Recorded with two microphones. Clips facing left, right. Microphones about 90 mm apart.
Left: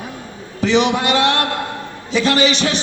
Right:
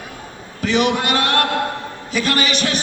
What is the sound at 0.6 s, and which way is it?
Speech, 45° right (ahead or behind).